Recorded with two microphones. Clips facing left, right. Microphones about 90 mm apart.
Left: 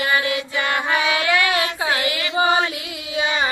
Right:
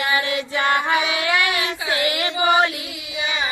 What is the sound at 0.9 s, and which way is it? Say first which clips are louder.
Music: left 1 dB; 20° right (ahead or behind).